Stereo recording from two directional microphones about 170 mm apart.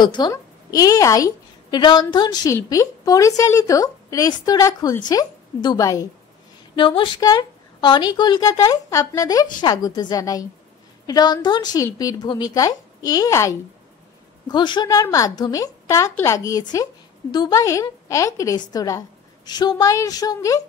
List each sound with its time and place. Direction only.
0.0 s a woman's voice: 25° left (ahead or behind)